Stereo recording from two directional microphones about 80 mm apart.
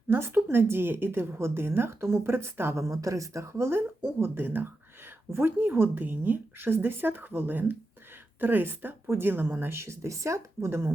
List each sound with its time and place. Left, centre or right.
0.1 s speech: right